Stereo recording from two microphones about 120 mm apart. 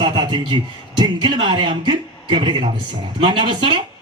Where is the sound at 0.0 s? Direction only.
40° right (ahead or behind).